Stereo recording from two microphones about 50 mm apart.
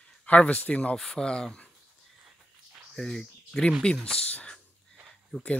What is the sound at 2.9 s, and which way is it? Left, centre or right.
Speech, centre.